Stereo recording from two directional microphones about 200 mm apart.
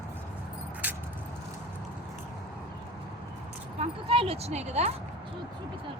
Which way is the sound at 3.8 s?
30° right (ahead or behind).